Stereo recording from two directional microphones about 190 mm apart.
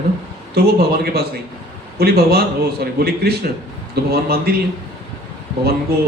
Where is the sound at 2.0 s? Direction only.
55° right (ahead or behind).